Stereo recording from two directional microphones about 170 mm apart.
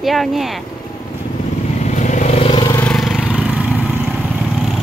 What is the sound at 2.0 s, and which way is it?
Vehicle, 45° left (ahead or behind).